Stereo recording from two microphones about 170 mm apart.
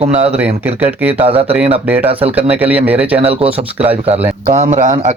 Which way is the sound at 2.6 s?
10° right (ahead or behind).